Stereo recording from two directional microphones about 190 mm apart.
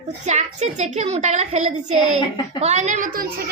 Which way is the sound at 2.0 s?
20° left (ahead or behind).